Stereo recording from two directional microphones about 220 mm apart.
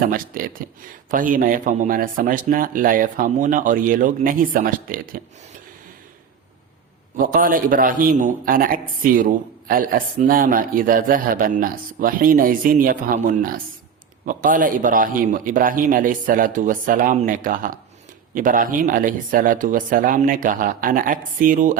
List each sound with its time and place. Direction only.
0.0 s speech: 40° right (ahead or behind)
7.2 s speech: 40° right (ahead or behind)